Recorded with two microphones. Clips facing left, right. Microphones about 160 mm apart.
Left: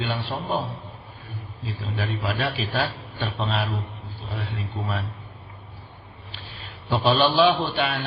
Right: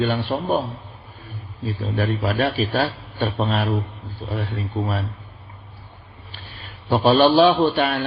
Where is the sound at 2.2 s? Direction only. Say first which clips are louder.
Right 5 dB; 45° right (ahead or behind).